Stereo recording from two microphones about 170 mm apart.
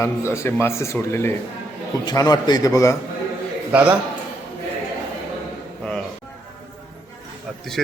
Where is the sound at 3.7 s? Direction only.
10° right (ahead or behind).